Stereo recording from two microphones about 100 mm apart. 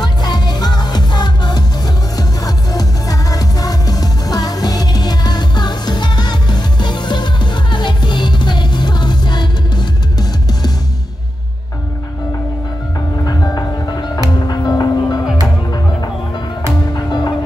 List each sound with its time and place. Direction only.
0.0 s music: 45° left (ahead or behind)
13.2 s music: 40° left (ahead or behind)
16.9 s music: 45° left (ahead or behind)